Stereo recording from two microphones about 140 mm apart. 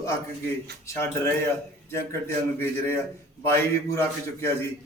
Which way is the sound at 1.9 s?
20° left (ahead or behind).